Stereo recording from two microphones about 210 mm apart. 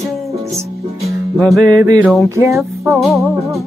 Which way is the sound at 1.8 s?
15° right (ahead or behind).